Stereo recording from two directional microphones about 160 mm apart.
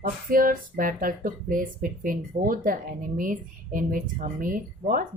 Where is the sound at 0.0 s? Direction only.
60° right (ahead or behind).